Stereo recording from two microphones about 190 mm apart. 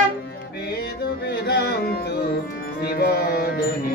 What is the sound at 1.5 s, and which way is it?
Music, 60° left (ahead or behind).